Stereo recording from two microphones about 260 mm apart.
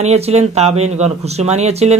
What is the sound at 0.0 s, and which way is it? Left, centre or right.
Speech, right.